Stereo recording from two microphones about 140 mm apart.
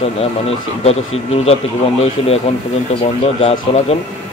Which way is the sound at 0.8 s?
45° left (ahead or behind).